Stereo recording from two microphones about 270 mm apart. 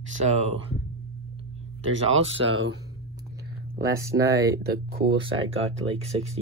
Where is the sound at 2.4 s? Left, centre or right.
Right.